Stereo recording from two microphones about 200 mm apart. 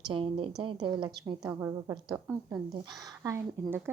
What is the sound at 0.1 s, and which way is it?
A woman's voice, 25° right (ahead or behind).